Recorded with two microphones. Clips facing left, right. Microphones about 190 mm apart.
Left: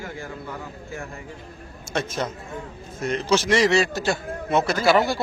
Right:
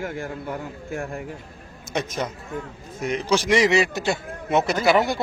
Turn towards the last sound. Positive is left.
turn(degrees=-20)  # may be behind; listen again after turning